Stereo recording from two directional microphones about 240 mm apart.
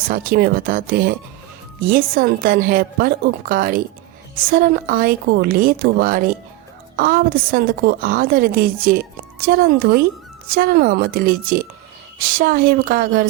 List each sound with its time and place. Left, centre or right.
0.1 s a woman's voice: right